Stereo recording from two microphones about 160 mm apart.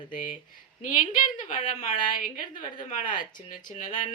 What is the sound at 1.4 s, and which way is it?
Speech, 55° left (ahead or behind).